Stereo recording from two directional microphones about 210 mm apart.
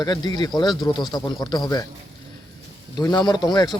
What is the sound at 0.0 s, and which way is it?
Speech, 20° left (ahead or behind).